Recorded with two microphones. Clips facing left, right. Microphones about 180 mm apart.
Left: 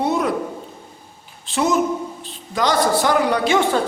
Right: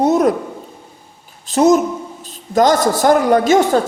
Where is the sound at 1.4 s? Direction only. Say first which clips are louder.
Right 7 dB; 40° right (ahead or behind).